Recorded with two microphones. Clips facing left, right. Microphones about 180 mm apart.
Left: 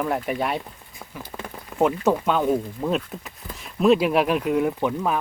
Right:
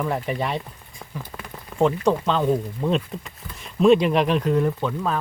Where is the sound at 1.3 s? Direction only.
10° left (ahead or behind).